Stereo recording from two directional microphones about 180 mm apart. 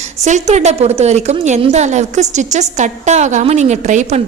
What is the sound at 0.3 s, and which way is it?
A woman's voice, 40° right (ahead or behind).